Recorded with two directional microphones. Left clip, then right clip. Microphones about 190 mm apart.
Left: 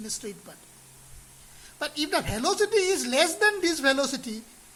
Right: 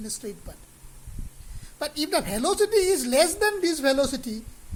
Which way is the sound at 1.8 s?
20° right (ahead or behind).